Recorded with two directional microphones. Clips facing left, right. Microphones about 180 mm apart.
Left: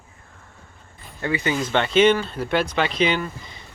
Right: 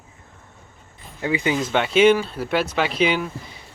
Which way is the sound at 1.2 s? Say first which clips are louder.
Right 2 dB; 10° right (ahead or behind).